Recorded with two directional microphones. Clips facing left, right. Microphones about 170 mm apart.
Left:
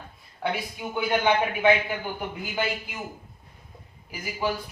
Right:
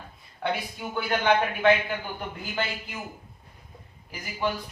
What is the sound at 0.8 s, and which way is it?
Speech, 15° left (ahead or behind).